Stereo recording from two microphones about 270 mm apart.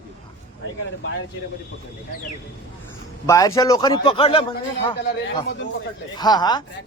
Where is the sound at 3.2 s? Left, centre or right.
Centre.